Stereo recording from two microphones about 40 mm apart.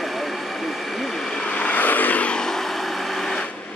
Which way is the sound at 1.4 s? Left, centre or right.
Left.